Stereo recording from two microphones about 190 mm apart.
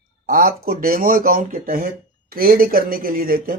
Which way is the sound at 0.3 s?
50° right (ahead or behind).